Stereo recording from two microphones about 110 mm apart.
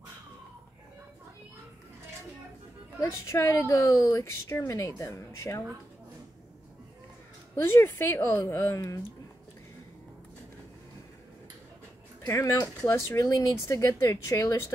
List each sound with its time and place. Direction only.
3.0 s a woman's voice: 25° left (ahead or behind)
7.5 s a woman's voice: 20° left (ahead or behind)
12.3 s a woman's voice: 25° left (ahead or behind)